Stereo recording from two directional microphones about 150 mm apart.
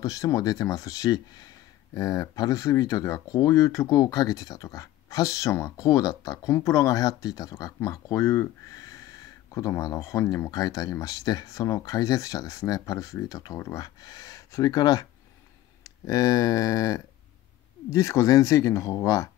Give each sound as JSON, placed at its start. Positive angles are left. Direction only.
{"t": 0.0, "sound": "speech", "side_deg": 20}